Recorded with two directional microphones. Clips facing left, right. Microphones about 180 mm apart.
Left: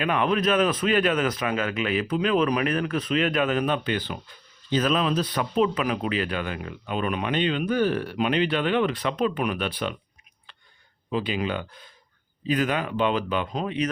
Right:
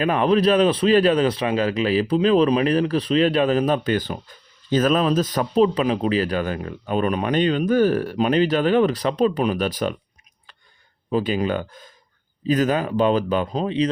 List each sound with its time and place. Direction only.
0.0 s a man's voice: 35° right (ahead or behind)
11.1 s a man's voice: 40° right (ahead or behind)